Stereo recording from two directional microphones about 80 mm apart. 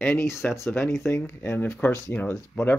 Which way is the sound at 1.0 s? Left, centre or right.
Left.